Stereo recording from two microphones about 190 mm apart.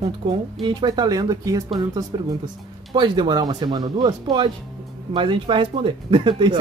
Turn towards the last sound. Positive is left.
turn(degrees=-25)  # may be behind; listen again after turning